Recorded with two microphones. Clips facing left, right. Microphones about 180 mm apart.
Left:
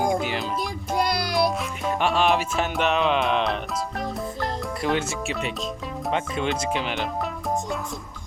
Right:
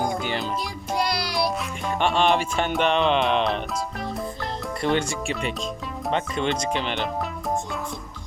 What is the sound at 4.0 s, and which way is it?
Music, centre (ahead or behind).